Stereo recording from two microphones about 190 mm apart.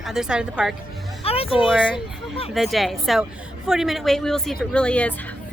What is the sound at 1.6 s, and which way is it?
A woman's voice, 5° right (ahead or behind).